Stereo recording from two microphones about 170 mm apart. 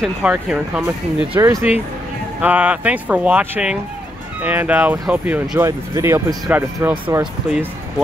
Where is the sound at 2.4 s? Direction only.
10° right (ahead or behind).